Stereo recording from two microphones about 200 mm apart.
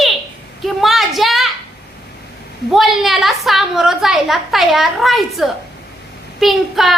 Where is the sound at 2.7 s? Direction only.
Centre (ahead or behind).